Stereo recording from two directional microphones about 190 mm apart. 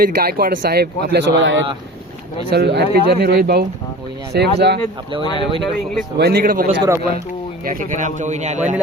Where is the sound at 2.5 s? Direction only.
60° right (ahead or behind).